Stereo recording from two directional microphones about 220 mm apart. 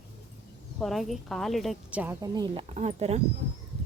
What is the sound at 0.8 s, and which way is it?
A woman's voice, centre (ahead or behind).